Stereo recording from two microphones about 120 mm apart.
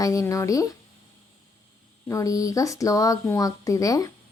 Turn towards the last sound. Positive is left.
turn(degrees=30)  # may be behind; listen again after turning